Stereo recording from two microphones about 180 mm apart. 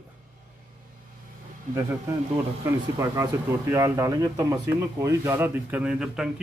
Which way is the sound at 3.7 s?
20° right (ahead or behind).